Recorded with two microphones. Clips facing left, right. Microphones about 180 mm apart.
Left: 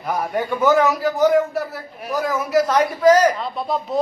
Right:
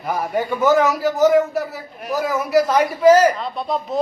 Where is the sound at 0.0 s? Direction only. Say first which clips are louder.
Right 1 dB; centre (ahead or behind).